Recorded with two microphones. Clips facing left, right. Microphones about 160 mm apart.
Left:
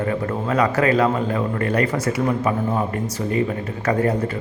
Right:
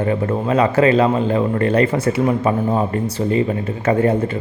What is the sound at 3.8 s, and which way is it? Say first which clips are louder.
Speech: right 4 dB; 25° right (ahead or behind).